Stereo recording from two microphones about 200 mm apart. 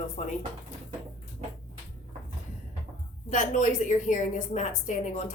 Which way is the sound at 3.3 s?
40° left (ahead or behind).